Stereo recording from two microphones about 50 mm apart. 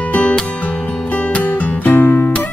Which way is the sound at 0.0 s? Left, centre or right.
Left.